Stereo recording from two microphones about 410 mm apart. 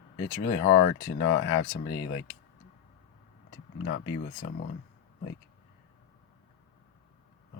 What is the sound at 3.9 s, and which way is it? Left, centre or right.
Speech, left.